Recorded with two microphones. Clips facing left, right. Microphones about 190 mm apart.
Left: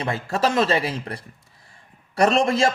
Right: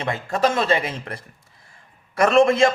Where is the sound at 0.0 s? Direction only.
35° left (ahead or behind).